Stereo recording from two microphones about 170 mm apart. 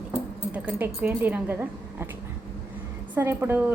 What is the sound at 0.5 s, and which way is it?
Speech, 10° right (ahead or behind).